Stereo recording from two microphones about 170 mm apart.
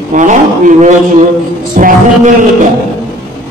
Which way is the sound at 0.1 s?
50° right (ahead or behind).